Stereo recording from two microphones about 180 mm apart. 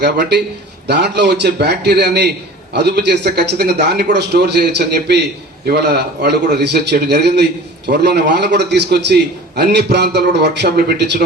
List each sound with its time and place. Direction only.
0.0 s a man's voice: 70° right (ahead or behind)